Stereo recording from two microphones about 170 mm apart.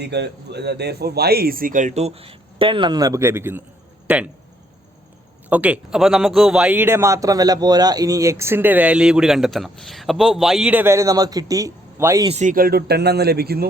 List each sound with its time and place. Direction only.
0.0 s speech: 80° right; by 4.3 s 10° right (ahead or behind)
5.5 s a man's voice: 10° right (ahead or behind)
12.3 s speech: 45° right (ahead or behind); by 13.7 s 65° right (ahead or behind)